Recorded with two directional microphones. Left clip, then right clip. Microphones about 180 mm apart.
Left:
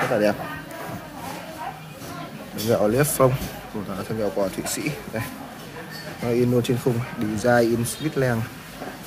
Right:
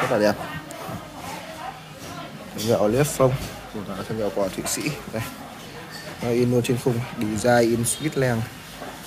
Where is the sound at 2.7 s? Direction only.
10° left (ahead or behind).